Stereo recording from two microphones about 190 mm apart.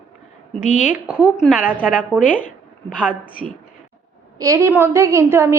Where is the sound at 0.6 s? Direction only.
40° left (ahead or behind).